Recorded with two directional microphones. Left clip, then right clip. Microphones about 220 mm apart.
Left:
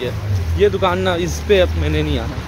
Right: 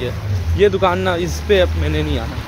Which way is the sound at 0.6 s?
40° right (ahead or behind).